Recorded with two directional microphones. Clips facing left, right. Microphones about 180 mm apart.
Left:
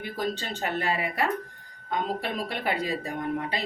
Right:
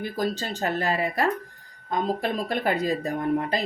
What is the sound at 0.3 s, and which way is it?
Speech, 40° right (ahead or behind).